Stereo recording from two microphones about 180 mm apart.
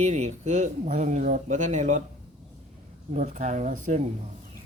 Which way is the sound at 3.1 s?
45° right (ahead or behind).